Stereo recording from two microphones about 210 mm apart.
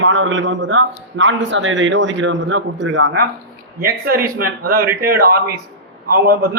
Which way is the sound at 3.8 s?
45° right (ahead or behind).